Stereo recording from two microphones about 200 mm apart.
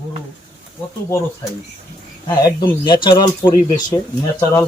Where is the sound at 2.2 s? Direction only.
20° left (ahead or behind).